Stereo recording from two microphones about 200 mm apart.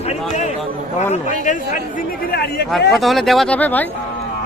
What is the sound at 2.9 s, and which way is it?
Speech, centre (ahead or behind).